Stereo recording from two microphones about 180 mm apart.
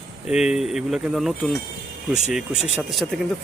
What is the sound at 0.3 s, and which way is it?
Speech, 5° right (ahead or behind).